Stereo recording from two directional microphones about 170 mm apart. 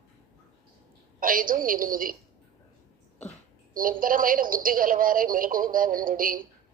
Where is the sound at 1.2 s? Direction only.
55° right (ahead or behind).